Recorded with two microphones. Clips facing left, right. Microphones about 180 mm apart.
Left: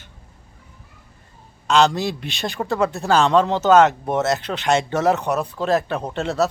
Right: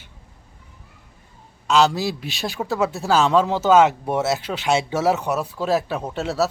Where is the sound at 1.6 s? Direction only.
5° right (ahead or behind).